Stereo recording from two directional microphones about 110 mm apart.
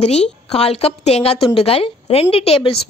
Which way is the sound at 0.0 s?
70° left (ahead or behind).